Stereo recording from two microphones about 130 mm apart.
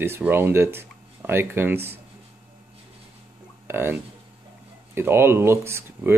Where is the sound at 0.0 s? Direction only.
15° right (ahead or behind).